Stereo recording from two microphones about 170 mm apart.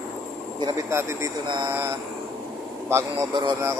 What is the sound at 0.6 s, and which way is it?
Speech, 15° right (ahead or behind).